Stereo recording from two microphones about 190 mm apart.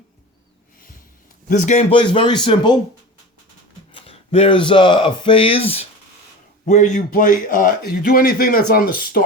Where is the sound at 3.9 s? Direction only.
30° left (ahead or behind).